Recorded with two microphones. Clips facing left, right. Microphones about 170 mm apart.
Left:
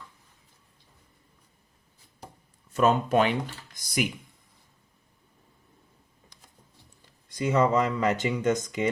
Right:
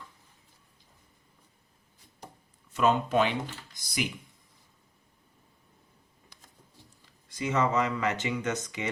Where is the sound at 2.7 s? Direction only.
45° left (ahead or behind).